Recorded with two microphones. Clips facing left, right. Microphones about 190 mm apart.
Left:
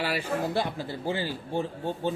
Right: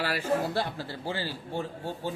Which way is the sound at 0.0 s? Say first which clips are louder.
Right 1 dB; 15° left (ahead or behind).